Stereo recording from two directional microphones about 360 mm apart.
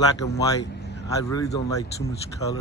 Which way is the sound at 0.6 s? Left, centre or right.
Left.